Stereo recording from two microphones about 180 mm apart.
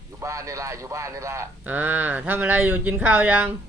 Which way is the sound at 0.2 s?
15° right (ahead or behind).